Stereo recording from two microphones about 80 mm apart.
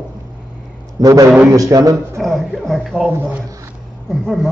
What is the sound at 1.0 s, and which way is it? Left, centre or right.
A man's voice, right.